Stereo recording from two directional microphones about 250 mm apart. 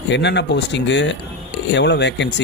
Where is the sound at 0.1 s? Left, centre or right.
Left.